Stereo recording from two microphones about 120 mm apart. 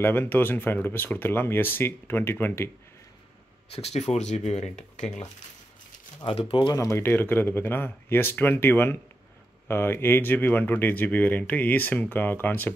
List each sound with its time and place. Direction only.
0.0 s speech: 15° left (ahead or behind)
3.7 s speech: 65° left (ahead or behind)
6.2 s speech: 50° left (ahead or behind)
6.8 s speech: 20° left (ahead or behind)